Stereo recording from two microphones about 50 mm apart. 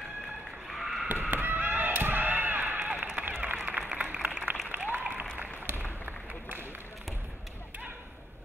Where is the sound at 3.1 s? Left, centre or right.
Right.